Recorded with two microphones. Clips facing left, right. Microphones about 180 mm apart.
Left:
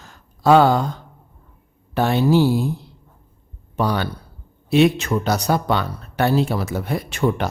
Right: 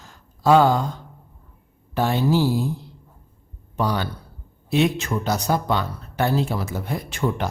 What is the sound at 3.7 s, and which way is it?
Speech, 65° left (ahead or behind).